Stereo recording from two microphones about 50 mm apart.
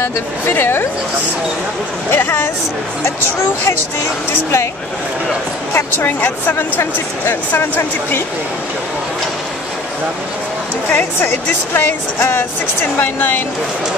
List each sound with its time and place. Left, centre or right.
0.0 s speech: left
2.0 s speech: left
5.7 s speech: left
7.5 s speech: left
10.9 s speech: left